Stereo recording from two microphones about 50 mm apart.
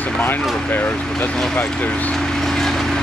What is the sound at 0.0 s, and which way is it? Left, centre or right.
Speech, left.